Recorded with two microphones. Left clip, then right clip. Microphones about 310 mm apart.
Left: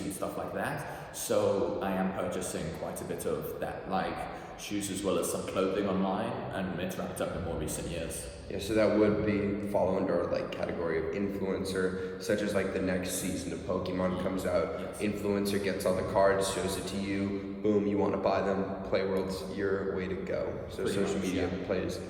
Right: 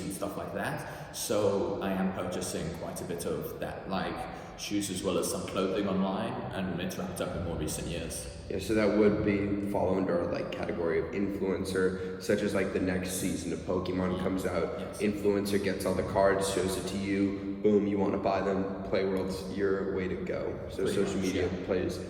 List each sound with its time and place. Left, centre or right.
1.3 s a man's voice: centre
5.5 s a man's voice: centre
8.7 s a man's voice: centre